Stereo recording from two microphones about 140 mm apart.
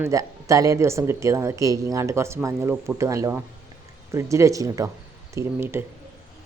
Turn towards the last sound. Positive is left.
turn(degrees=-15)  # may be behind; listen again after turning